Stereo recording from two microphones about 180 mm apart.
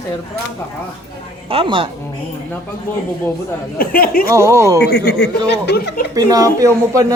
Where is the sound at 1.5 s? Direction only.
30° right (ahead or behind).